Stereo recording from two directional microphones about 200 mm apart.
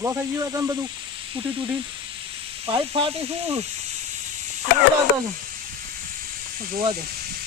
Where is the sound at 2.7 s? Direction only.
25° right (ahead or behind).